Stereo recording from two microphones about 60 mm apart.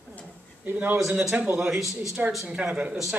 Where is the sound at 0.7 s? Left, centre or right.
Right.